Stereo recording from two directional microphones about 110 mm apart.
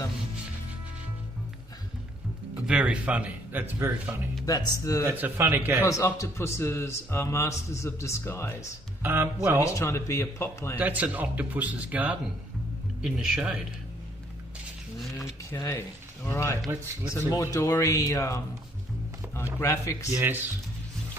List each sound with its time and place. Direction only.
2.5 s speech: 10° right (ahead or behind)
4.5 s speech: 30° left (ahead or behind)
5.0 s a man's voice: 20° right (ahead or behind)
5.9 s speech: 30° left (ahead or behind)
9.0 s a man's voice: 20° right (ahead or behind)
9.6 s speech: 25° left (ahead or behind)
10.8 s speech: 15° right (ahead or behind)
15.1 s a sound: 25° left (ahead or behind)
16.3 s speech: 25° left (ahead or behind)
19.6 s speech: 25° left (ahead or behind)
20.2 s a man's voice: 20° right (ahead or behind)